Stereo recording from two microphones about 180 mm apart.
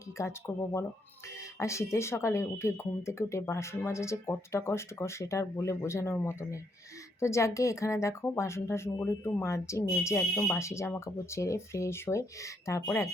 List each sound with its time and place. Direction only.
0.2 s speech: 15° left (ahead or behind)